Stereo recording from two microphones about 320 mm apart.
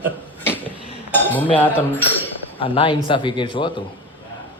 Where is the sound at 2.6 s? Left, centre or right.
Centre.